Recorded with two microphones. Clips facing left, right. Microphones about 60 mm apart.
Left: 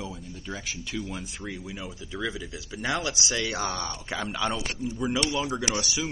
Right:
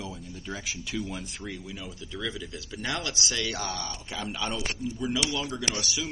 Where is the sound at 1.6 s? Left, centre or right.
Centre.